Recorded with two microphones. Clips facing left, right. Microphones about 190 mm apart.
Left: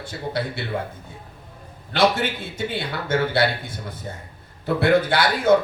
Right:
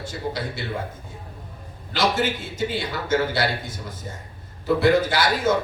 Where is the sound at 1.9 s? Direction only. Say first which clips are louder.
Left 2 dB; 60° left (ahead or behind).